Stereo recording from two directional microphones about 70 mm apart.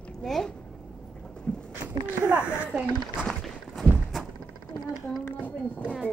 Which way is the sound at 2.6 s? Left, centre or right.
Centre.